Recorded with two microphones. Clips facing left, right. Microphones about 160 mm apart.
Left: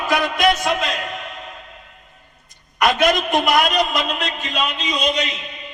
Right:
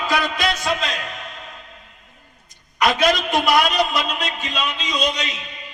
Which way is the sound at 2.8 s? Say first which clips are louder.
Left 1 dB; 50° left (ahead or behind).